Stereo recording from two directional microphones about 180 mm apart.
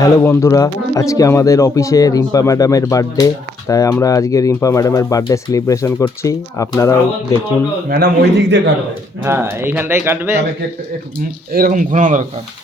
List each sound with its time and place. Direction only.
0.0 s speech: 15° left (ahead or behind)
7.9 s a man's voice: 55° right (ahead or behind); by 8.7 s 75° right (ahead or behind)
9.2 s speech: 10° right (ahead or behind)
11.5 s speech: 50° right (ahead or behind)